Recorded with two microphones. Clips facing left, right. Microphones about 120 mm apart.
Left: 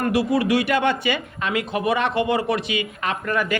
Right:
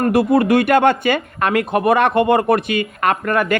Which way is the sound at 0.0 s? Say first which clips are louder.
Right 6 dB; 55° right (ahead or behind).